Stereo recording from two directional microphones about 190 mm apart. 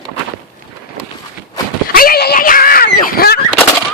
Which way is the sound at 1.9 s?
50° left (ahead or behind).